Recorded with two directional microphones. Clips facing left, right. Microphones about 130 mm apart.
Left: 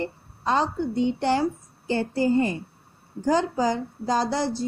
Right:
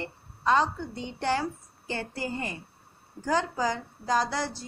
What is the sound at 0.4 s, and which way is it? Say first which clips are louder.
A woman's voice: left 1 dB; 25° left (ahead or behind).